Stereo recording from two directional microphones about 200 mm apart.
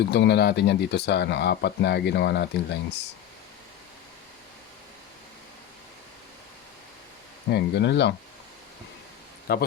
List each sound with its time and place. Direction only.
0.0 s speech: 55° left (ahead or behind)
7.5 s speech: 60° left (ahead or behind)
9.5 s speech: 50° left (ahead or behind)